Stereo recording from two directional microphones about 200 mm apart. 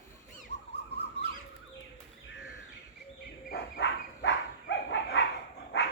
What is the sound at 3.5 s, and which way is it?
Dog, 60° left (ahead or behind).